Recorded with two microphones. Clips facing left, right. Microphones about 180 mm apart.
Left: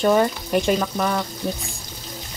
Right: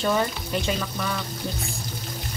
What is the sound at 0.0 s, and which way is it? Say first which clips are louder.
Speech: left 6 dB; 50° left (ahead or behind).